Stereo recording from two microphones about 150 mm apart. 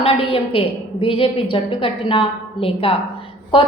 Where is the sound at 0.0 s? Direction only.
40° left (ahead or behind).